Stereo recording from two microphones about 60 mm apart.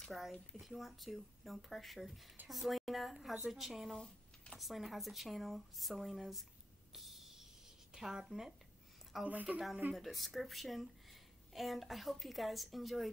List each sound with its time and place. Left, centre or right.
0.0 s a woman's voice: centre
6.9 s a sound: centre
7.9 s a woman's voice: centre
9.2 s a woman's voice: right
9.9 s a woman's voice: centre